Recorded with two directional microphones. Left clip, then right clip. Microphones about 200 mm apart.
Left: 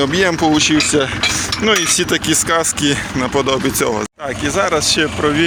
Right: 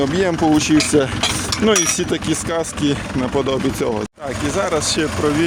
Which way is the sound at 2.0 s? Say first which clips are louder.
Left 5 dB; 5° right (ahead or behind).